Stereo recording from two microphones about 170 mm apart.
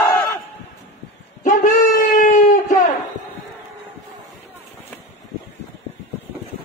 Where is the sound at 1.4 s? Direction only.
50° left (ahead or behind).